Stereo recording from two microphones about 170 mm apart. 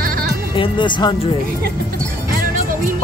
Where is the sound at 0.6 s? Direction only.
25° left (ahead or behind).